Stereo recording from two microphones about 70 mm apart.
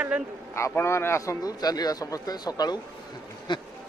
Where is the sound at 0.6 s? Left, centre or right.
Left.